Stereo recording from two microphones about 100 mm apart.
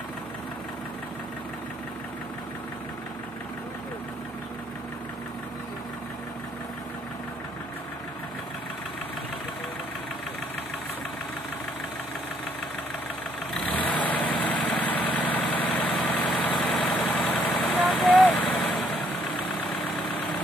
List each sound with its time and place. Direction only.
13.7 s vehicle: 15° left (ahead or behind)